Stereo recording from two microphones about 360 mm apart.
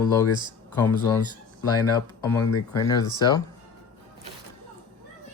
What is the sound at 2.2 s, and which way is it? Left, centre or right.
Speech, centre.